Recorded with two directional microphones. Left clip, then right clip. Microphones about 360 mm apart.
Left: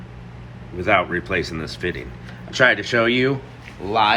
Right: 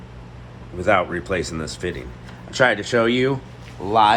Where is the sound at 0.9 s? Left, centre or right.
Centre.